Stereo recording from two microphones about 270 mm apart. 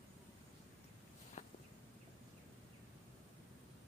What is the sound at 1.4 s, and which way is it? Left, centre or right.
Walk, left.